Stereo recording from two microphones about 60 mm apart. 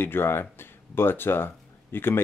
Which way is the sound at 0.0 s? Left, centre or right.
Left.